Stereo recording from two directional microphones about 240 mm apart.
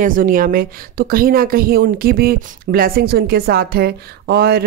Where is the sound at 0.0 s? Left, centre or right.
Right.